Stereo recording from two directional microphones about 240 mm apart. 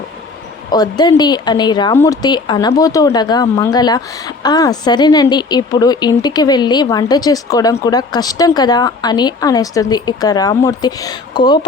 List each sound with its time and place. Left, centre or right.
0.7 s speech: centre